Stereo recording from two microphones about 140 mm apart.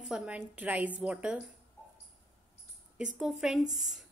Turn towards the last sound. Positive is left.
turn(degrees=-5)  # may be behind; listen again after turning